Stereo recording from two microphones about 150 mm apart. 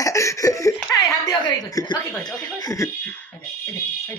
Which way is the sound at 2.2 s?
25° left (ahead or behind).